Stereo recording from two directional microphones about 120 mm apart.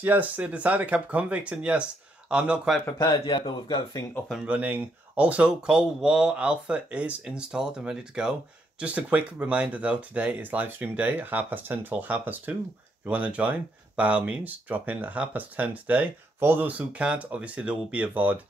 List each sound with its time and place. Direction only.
0.0 s speech: 15° right (ahead or behind)
3.0 s a man's voice: 35° left (ahead or behind)
4.5 s speech: 10° right (ahead or behind)